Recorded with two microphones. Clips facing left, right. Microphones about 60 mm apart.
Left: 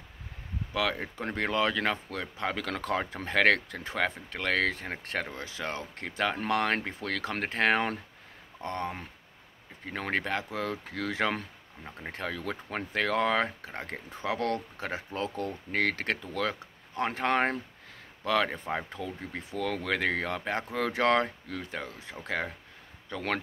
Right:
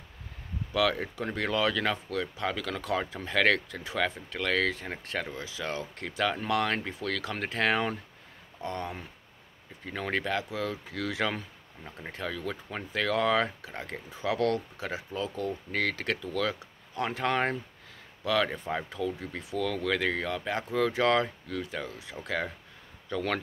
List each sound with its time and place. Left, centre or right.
0.7 s speech: left
2.6 s speech: left